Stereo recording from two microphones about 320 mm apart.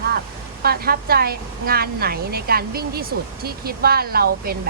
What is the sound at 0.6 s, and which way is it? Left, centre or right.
A woman's voice, right.